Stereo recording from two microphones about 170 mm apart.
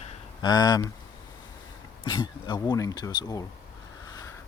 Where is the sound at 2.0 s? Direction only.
25° left (ahead or behind).